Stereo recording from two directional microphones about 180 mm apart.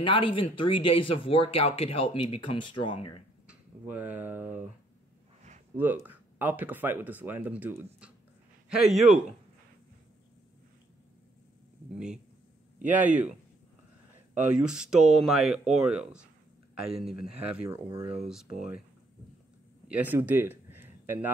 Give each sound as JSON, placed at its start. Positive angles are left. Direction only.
{"t": 0.0, "sound": "speech", "side_deg": 30}
{"t": 3.4, "sound": "speech", "side_deg": -10}
{"t": 5.8, "sound": "speech", "side_deg": -10}
{"t": 14.3, "sound": "speech", "side_deg": -5}
{"t": 17.6, "sound": "speech", "side_deg": -20}
{"t": 19.9, "sound": "speech", "side_deg": -10}